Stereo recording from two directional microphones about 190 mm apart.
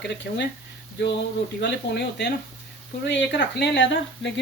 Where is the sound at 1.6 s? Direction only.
65° left (ahead or behind).